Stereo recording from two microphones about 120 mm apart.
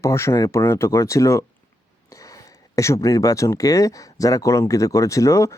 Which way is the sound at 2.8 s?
25° left (ahead or behind).